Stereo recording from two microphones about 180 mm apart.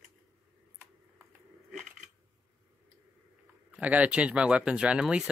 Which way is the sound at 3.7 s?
10° right (ahead or behind).